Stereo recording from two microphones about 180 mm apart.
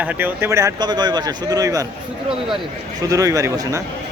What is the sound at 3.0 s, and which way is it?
Speech, 20° right (ahead or behind).